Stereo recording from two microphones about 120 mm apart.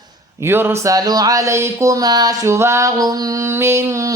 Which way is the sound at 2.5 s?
20° right (ahead or behind).